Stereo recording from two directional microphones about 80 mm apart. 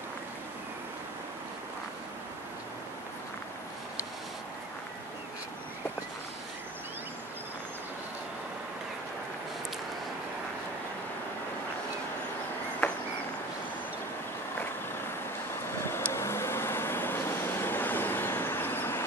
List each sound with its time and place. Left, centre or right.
16.1 s vehicle: left